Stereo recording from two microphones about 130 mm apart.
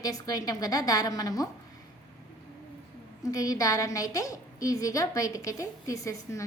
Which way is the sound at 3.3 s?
25° left (ahead or behind).